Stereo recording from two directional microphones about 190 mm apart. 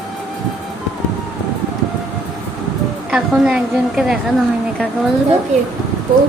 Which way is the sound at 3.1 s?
5° right (ahead or behind).